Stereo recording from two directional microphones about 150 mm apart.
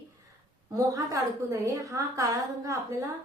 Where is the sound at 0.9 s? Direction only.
20° right (ahead or behind).